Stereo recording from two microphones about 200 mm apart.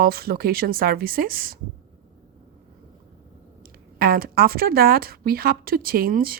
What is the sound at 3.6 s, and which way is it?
Speech, 45° right (ahead or behind).